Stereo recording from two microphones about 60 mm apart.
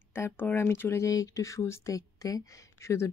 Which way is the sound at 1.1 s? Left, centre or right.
Left.